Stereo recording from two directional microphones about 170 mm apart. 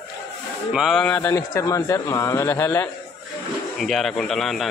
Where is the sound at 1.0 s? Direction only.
10° left (ahead or behind).